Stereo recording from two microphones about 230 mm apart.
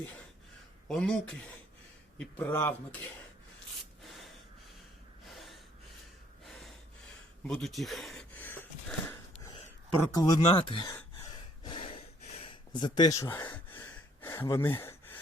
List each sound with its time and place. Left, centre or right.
0.9 s speech: centre
4.0 s gasp: centre
7.4 s a sound: centre
10.2 s speech: centre
11.6 s gasp: left
13.8 s a sound: centre